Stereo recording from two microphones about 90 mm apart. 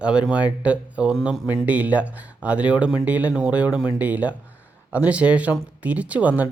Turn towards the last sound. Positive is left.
turn(degrees=-15)  # may be behind; listen again after turning